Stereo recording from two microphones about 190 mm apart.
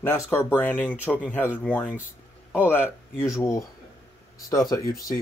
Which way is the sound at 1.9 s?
10° right (ahead or behind).